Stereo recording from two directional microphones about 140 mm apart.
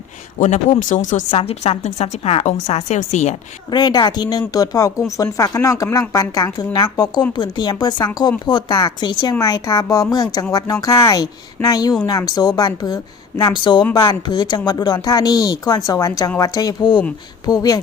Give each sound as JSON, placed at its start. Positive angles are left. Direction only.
{"t": 0.3, "sound": "speech", "side_deg": 65}
{"t": 1.3, "sound": "a woman's voice", "side_deg": 45}
{"t": 3.7, "sound": "speech", "side_deg": 30}